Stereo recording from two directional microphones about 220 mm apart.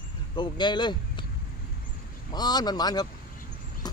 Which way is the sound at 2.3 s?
20° left (ahead or behind).